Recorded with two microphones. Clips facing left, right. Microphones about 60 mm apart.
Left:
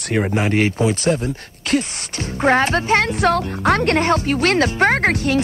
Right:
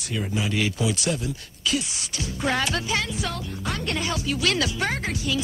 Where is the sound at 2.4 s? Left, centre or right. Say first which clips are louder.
Left 9 dB; left.